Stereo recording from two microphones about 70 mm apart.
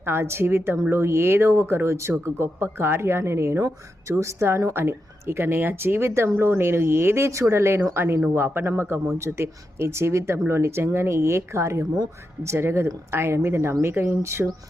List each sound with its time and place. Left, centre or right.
0.0 s speech: right